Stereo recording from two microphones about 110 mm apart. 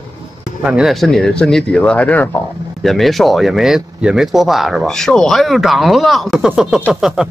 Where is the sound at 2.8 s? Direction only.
Centre (ahead or behind).